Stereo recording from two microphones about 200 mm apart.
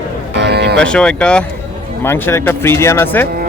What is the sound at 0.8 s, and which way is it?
Speech, 5° left (ahead or behind).